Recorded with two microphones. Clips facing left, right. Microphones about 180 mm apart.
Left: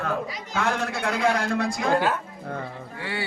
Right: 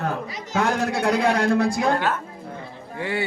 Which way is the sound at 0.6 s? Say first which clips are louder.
Right 4 dB; 40° right (ahead or behind).